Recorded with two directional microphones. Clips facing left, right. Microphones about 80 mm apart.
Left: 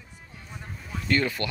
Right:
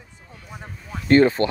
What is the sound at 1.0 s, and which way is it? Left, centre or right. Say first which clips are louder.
Speech: right 11 dB; right.